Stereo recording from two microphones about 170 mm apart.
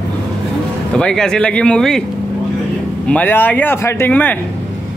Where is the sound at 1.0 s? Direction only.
5° left (ahead or behind).